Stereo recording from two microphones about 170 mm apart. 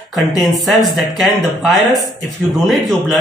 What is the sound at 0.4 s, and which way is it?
Speech, centre (ahead or behind).